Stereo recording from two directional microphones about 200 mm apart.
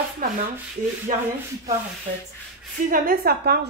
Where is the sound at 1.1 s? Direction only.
40° right (ahead or behind).